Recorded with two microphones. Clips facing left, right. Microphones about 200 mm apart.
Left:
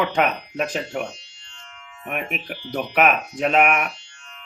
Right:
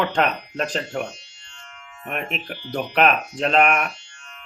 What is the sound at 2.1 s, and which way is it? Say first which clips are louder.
Speech: even; 5° left (ahead or behind).